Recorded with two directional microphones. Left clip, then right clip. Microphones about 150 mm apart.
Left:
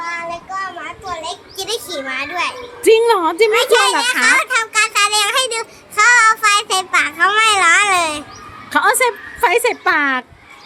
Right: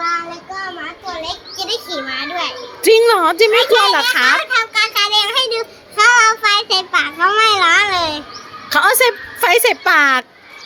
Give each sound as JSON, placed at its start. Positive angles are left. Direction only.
{"t": 1.2, "sound": "a child's voice", "side_deg": 25}
{"t": 2.8, "sound": "a woman's voice", "side_deg": 15}
{"t": 3.6, "sound": "a woman's voice", "side_deg": 35}
{"t": 4.4, "sound": "child singing", "side_deg": 30}
{"t": 8.7, "sound": "a woman's voice", "side_deg": 5}